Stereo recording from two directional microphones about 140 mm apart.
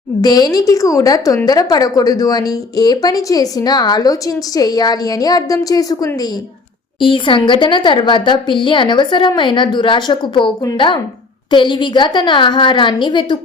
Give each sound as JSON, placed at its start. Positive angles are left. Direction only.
{"t": 0.2, "sound": "speech", "side_deg": 30}
{"t": 7.0, "sound": "speech", "side_deg": 35}